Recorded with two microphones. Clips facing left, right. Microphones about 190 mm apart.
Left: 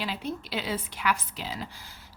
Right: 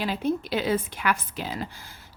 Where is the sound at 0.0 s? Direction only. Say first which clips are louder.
Right 7 dB; 50° right (ahead or behind).